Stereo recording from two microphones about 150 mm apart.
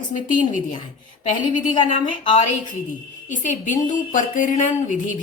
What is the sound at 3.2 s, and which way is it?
A woman's voice, 55° left (ahead or behind).